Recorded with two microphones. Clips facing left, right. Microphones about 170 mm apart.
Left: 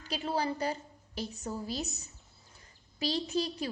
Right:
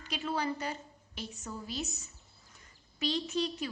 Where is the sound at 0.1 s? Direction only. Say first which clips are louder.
Left 2 dB; 30° left (ahead or behind).